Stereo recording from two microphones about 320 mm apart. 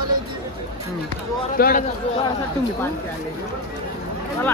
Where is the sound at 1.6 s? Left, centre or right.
Left.